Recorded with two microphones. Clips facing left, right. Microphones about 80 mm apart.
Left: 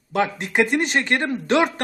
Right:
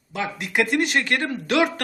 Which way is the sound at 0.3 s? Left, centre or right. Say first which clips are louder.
Left 2 dB; left.